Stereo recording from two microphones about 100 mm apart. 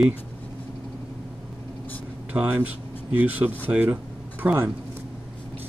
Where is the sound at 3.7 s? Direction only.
15° right (ahead or behind).